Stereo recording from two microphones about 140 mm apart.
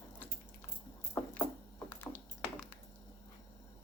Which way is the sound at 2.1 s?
10° left (ahead or behind).